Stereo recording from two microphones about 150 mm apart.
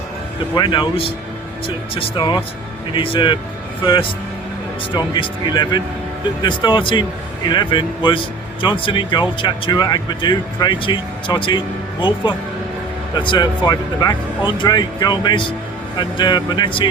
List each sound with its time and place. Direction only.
0.5 s speech: 30° left (ahead or behind)
4.9 s speech: 30° left (ahead or behind)
13.1 s speech: 30° left (ahead or behind)